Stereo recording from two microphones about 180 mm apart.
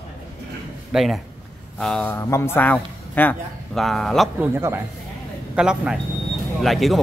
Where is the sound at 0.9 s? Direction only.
Centre (ahead or behind).